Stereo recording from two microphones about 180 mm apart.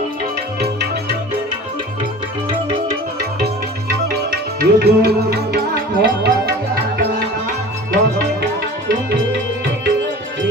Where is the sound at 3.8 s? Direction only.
55° right (ahead or behind).